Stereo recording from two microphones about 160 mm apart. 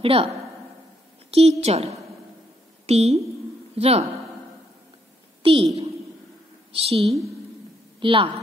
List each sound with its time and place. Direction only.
0.0 s a woman's voice: 35° right (ahead or behind)
1.3 s a woman's voice: 40° right (ahead or behind)
5.4 s a woman's voice: 35° right (ahead or behind)
6.7 s a woman's voice: 35° right (ahead or behind)